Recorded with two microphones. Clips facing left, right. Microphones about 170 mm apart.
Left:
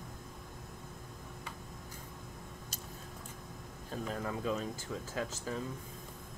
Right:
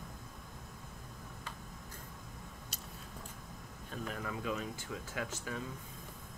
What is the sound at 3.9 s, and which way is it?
Speech, 30° left (ahead or behind).